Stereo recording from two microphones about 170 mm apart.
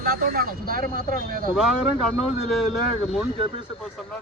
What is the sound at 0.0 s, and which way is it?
Speech, 60° right (ahead or behind).